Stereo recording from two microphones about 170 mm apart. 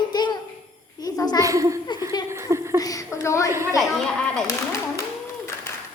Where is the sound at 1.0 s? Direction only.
20° left (ahead or behind).